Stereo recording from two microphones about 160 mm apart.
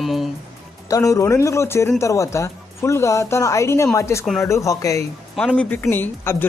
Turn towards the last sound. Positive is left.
turn(degrees=15)  # may be behind; listen again after turning